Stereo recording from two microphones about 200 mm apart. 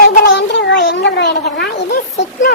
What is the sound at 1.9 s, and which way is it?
Speech, 40° left (ahead or behind).